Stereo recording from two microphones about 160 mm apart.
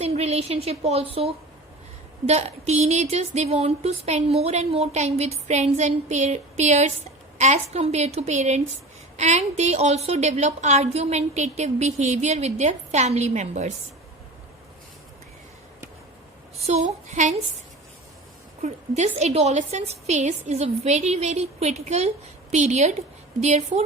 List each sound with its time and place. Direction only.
0.0 s a woman's voice: 40° right (ahead or behind)
16.6 s speech: 45° right (ahead or behind)
18.6 s speech: 45° right (ahead or behind)